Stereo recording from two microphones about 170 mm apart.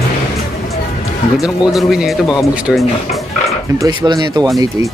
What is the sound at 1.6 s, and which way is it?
Speech, 5° right (ahead or behind).